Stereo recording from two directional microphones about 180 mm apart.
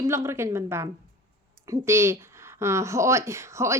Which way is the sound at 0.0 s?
15° right (ahead or behind).